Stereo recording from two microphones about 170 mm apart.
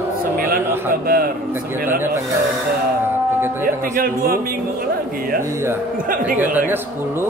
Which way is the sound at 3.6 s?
55° right (ahead or behind).